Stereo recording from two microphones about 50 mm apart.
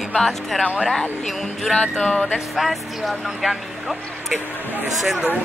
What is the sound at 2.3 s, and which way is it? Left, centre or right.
Speech, centre.